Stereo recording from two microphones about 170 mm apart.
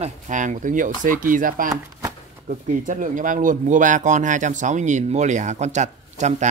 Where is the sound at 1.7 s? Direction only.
20° right (ahead or behind).